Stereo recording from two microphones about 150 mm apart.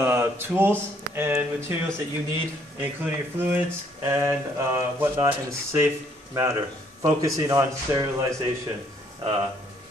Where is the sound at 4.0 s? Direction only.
20° right (ahead or behind).